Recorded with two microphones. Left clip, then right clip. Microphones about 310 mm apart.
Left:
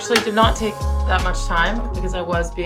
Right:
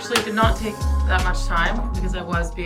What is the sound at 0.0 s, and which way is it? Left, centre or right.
Speech, centre.